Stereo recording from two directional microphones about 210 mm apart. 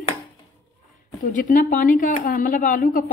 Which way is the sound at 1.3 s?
40° left (ahead or behind).